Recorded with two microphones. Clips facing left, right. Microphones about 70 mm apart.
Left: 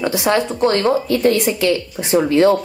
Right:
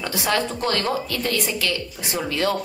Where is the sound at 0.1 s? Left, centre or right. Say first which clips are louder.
Left 6 dB; centre.